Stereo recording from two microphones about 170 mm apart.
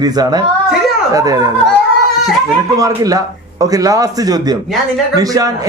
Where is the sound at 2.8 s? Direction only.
20° right (ahead or behind).